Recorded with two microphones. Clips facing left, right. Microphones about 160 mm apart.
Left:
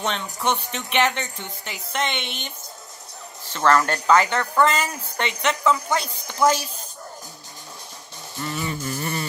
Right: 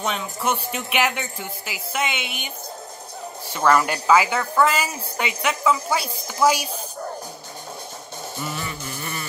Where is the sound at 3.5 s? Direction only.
10° right (ahead or behind).